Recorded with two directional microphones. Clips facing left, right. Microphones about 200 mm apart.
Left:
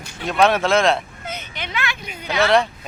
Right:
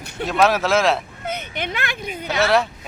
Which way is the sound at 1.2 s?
60° right (ahead or behind).